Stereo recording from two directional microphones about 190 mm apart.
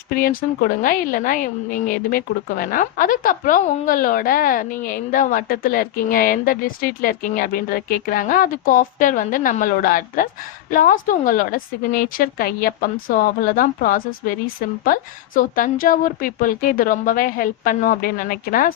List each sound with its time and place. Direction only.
0.1 s a woman's voice: 50° left (ahead or behind)